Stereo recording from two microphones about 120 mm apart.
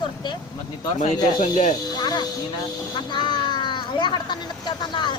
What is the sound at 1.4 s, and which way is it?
Speech, 85° left.